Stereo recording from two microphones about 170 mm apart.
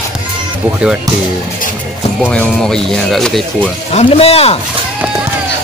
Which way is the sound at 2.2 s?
5° left (ahead or behind).